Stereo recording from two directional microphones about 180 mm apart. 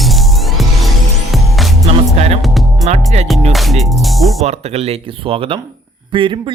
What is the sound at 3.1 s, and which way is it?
Music, 40° right (ahead or behind).